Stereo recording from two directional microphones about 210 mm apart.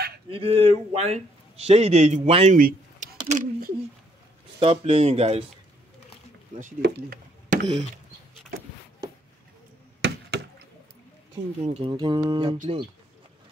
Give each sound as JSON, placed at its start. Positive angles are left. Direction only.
{"t": 0.3, "sound": "a man's voice", "side_deg": -25}
{"t": 6.6, "sound": "speech", "side_deg": -50}
{"t": 10.0, "sound": "a sound", "side_deg": -50}
{"t": 11.6, "sound": "a man's voice", "side_deg": -30}